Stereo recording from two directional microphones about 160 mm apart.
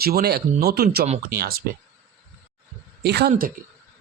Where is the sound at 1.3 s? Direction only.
70° right (ahead or behind).